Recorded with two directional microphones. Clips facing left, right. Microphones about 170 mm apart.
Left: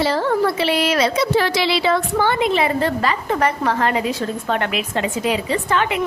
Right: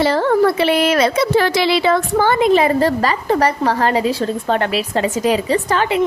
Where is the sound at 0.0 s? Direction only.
55° right (ahead or behind).